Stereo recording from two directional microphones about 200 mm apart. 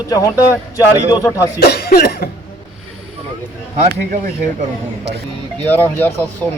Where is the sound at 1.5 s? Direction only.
50° left (ahead or behind).